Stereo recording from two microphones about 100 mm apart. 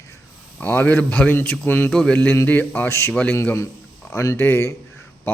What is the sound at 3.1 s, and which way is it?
Speech, 10° left (ahead or behind).